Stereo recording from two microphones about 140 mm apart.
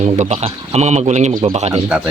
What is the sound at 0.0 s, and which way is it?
A man's voice, 55° right (ahead or behind).